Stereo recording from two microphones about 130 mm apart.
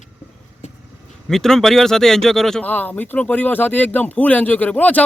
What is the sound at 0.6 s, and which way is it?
Vehicle, 65° left (ahead or behind).